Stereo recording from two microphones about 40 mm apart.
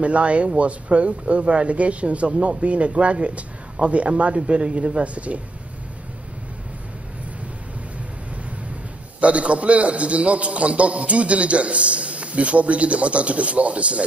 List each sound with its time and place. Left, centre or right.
0.0 s a man's voice: right
9.2 s a man's voice: right